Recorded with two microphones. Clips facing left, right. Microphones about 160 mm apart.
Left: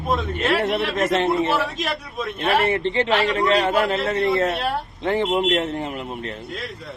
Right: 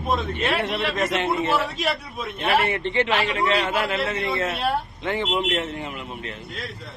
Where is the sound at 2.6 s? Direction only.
30° left (ahead or behind).